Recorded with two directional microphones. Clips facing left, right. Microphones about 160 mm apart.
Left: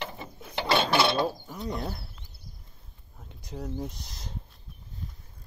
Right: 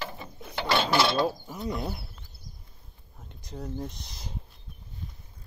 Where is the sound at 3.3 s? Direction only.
5° left (ahead or behind).